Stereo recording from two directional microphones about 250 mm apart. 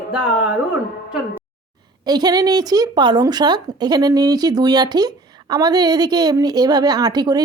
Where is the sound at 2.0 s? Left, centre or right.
Centre.